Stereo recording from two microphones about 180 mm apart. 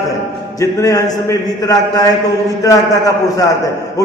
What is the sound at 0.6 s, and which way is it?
Speech, 20° left (ahead or behind).